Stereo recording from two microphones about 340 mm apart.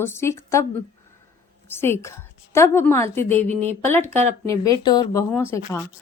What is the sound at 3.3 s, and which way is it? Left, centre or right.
Speech, centre.